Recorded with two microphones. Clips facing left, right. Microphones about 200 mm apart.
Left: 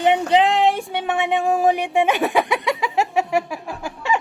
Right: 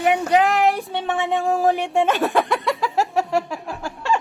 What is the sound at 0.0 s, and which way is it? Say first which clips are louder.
Child singing: left 1 dB; 25° left (ahead or behind).